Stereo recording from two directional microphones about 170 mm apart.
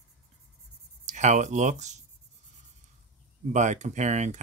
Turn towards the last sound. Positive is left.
turn(degrees=-45)  # may be behind; listen again after turning